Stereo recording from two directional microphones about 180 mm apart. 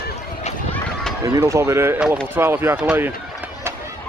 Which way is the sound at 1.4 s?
15° right (ahead or behind).